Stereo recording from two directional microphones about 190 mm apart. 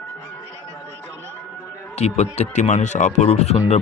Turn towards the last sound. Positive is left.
turn(degrees=35)  # may be behind; listen again after turning